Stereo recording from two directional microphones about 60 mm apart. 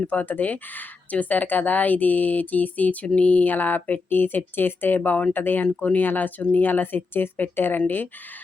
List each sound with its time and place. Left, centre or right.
0.0 s speech: left